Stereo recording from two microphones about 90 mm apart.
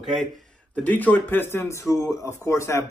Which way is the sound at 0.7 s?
20° left (ahead or behind).